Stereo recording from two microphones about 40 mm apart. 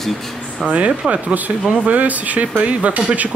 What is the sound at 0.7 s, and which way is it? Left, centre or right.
Speech, right.